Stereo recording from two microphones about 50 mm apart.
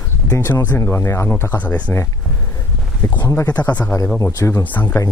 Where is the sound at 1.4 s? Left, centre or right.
Left.